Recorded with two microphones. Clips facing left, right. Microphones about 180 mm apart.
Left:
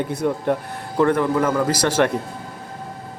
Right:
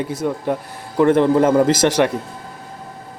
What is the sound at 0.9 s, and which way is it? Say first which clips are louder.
A man's voice: right 4 dB; 25° right (ahead or behind).